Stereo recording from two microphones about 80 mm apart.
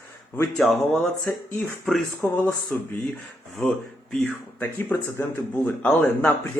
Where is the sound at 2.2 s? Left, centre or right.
Left.